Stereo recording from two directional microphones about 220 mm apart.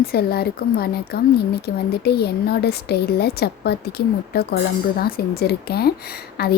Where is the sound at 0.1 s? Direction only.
45° left (ahead or behind).